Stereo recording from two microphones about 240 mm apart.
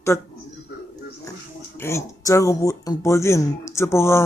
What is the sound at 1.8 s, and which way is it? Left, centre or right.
Speech, centre.